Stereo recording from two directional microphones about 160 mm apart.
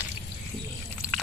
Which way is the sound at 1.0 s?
10° right (ahead or behind).